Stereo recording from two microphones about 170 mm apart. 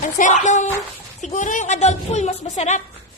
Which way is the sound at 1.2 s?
45° left (ahead or behind).